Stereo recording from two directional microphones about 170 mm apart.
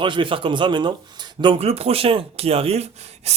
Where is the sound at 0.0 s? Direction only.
30° right (ahead or behind).